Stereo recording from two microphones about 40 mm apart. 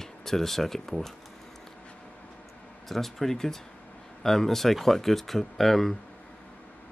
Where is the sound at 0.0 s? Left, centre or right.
Centre.